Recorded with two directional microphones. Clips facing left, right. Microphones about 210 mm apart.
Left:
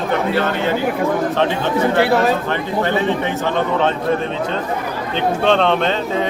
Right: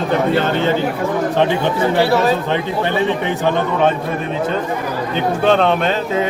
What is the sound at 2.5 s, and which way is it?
A man's voice, 15° right (ahead or behind).